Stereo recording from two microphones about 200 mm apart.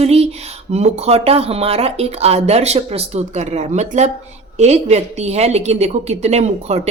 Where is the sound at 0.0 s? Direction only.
30° right (ahead or behind).